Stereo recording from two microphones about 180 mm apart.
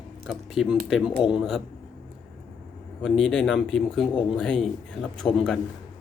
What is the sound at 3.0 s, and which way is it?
Speech, 5° left (ahead or behind).